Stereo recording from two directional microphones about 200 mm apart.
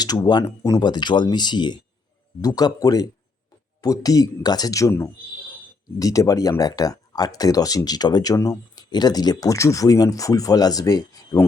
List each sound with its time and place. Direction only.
0.0 s speech: 20° left (ahead or behind)